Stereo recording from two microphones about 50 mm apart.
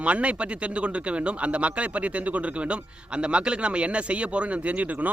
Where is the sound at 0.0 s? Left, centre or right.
Right.